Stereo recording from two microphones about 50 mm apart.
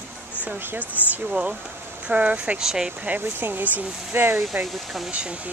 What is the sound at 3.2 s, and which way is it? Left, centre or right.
Speech, right.